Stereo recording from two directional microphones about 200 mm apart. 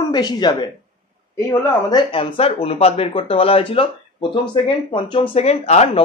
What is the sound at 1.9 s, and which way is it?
Speech, 25° left (ahead or behind).